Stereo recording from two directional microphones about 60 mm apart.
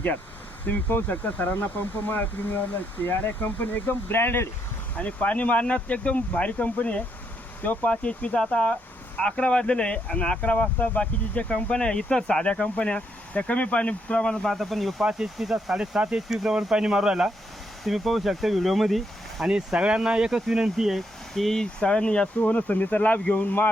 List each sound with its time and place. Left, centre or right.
0.6 s speech: left
4.9 s speech: left
14.4 s speech: centre
16.0 s speech: centre
17.8 s speech: centre
19.5 s speech: centre
21.3 s speech: centre; by 23.6 s left